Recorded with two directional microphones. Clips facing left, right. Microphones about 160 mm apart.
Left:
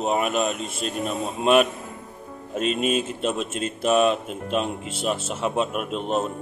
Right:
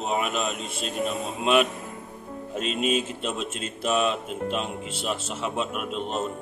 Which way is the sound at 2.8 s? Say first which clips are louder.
Left 2 dB; 45° left (ahead or behind).